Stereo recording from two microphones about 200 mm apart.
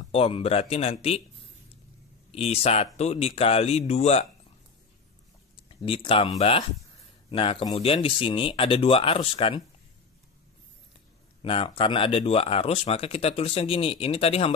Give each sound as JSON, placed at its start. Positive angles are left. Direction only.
{"t": 0.0, "sound": "speech", "side_deg": 30}
{"t": 2.3, "sound": "speech", "side_deg": 30}
{"t": 5.7, "sound": "speech", "side_deg": 25}
{"t": 11.4, "sound": "speech", "side_deg": 25}